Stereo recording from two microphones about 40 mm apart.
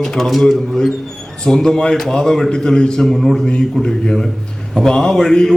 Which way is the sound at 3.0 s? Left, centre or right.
Centre.